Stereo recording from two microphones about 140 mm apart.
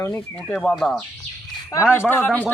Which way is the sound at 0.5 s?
10° left (ahead or behind).